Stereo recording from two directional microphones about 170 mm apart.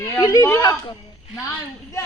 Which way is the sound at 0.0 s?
15° left (ahead or behind).